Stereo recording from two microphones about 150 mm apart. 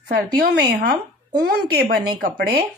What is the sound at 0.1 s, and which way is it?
Speech, 90° right.